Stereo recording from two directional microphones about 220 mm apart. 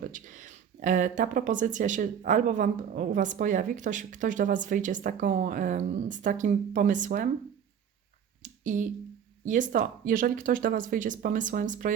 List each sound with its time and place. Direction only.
0.0 s speech: 35° right (ahead or behind)
8.4 s a sound: 35° right (ahead or behind)
9.4 s speech: 35° right (ahead or behind)